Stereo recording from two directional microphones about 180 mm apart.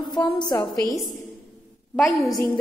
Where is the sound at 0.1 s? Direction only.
25° left (ahead or behind).